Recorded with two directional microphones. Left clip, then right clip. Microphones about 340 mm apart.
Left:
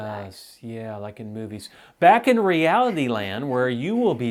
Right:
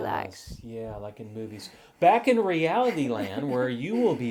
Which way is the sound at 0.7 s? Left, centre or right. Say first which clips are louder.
Left 3 dB; left.